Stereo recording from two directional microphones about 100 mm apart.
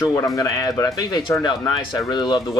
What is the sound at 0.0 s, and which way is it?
Speech, 35° left (ahead or behind).